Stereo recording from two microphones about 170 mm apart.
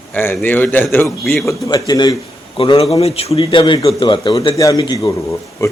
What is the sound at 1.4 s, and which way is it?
A man's voice, 25° left (ahead or behind).